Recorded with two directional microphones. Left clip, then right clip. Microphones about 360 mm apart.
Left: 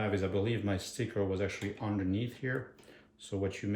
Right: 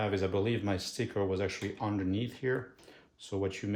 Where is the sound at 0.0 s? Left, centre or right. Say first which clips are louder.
Right 2 dB; centre.